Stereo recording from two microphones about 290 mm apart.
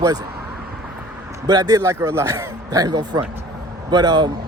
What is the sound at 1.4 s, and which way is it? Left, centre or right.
Speech, centre.